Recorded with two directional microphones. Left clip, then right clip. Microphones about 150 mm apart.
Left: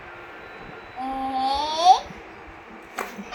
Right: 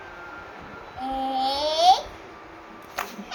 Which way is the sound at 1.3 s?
10° right (ahead or behind).